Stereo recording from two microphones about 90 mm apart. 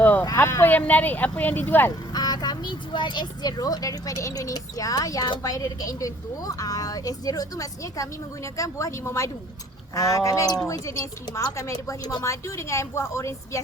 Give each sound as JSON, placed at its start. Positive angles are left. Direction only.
{"t": 0.0, "sound": "a sound", "side_deg": 20}
{"t": 0.3, "sound": "speech", "side_deg": 35}
{"t": 2.1, "sound": "a woman's voice", "side_deg": 50}